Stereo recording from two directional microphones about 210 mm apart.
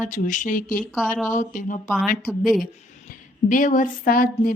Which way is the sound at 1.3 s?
40° left (ahead or behind).